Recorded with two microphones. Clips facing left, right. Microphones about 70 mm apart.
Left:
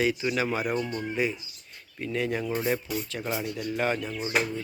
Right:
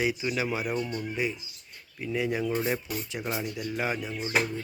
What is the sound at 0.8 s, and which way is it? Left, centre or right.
Speech, left.